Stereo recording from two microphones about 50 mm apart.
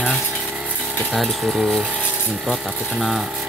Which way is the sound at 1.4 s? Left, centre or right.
Centre.